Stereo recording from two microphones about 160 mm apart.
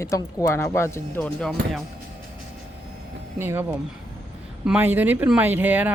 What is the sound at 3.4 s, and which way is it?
Speech, 15° right (ahead or behind).